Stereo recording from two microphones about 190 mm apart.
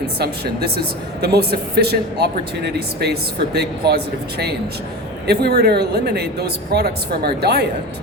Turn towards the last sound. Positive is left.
turn(degrees=-55)  # may be behind; listen again after turning